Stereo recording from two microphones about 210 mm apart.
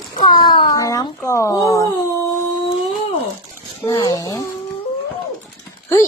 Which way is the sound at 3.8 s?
15° left (ahead or behind).